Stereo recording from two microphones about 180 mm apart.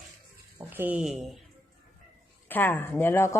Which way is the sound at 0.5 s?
10° right (ahead or behind).